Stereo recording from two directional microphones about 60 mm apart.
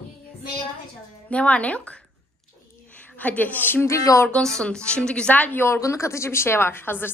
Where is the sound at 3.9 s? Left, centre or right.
Left.